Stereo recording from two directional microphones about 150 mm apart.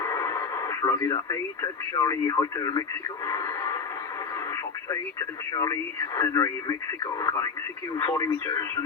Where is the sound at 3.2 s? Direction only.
20° left (ahead or behind).